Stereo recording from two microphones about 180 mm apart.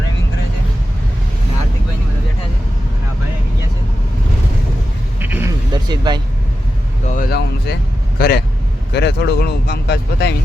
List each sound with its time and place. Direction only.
5.2 s vehicle: 10° right (ahead or behind)
5.7 s vehicle: 25° right (ahead or behind)
7.1 s vehicle: 55° left (ahead or behind)
8.2 s speech: 60° left (ahead or behind)